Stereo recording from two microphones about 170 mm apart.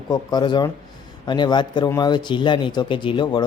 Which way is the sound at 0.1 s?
25° left (ahead or behind).